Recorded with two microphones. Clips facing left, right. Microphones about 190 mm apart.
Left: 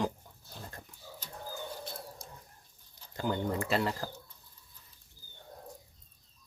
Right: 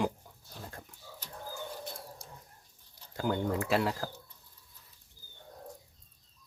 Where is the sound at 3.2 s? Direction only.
5° right (ahead or behind).